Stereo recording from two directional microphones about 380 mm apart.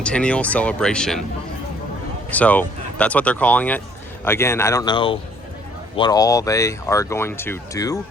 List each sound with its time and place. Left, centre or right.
0.0 s speech: centre
2.3 s speech: centre